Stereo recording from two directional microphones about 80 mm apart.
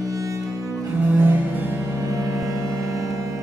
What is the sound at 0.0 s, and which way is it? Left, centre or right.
Music, right.